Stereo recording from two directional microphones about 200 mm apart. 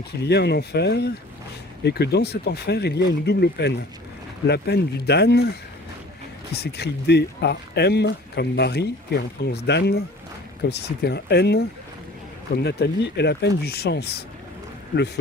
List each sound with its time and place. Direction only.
0.2 s speech: 55° left (ahead or behind)